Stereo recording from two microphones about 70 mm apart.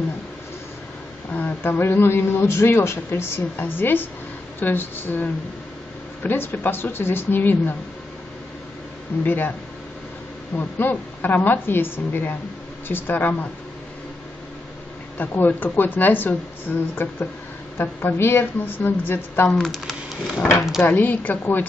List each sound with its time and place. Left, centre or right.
1.3 s speech: left
9.2 s speech: left
10.5 s speech: left
15.1 s speech: left
19.6 s speech: centre
20.8 s speech: left